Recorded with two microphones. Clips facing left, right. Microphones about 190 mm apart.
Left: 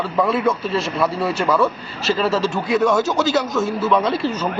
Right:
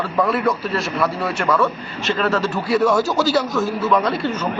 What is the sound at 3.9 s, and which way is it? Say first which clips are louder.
Speech: left 1 dB; centre (ahead or behind).